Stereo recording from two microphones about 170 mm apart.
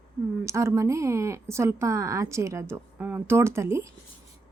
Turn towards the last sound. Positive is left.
turn(degrees=-15)  # may be behind; listen again after turning